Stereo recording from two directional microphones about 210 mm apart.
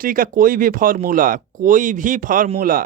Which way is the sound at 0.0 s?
40° right (ahead or behind).